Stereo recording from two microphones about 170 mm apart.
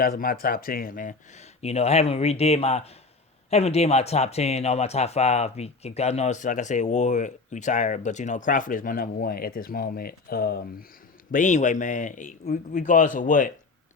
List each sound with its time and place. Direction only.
0.0 s speech: 60° left (ahead or behind)
11.3 s speech: 50° left (ahead or behind)